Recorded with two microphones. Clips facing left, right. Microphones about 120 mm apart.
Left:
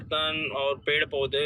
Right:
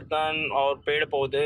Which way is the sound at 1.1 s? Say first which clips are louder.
Right 3 dB; 45° right (ahead or behind).